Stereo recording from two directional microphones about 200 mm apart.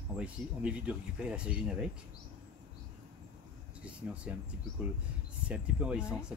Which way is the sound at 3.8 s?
5° right (ahead or behind).